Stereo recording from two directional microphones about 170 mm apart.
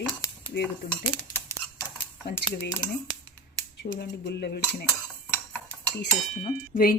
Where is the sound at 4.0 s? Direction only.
75° left (ahead or behind).